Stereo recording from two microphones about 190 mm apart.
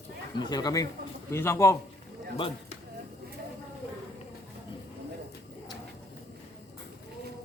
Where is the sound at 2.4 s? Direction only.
30° left (ahead or behind).